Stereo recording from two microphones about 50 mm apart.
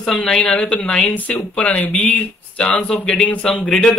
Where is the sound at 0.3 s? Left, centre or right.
Centre.